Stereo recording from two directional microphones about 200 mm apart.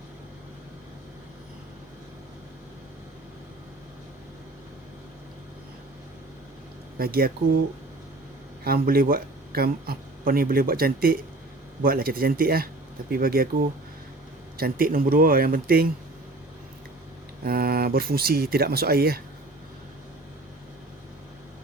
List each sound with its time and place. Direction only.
7.0 s speech: 50° right (ahead or behind)
8.6 s speech: 45° right (ahead or behind)
17.4 s speech: 50° right (ahead or behind)